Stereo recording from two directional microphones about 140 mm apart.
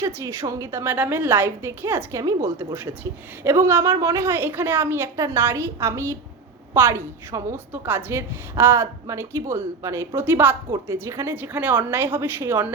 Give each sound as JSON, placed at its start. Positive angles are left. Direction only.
{"t": 0.0, "sound": "a woman's voice", "side_deg": -20}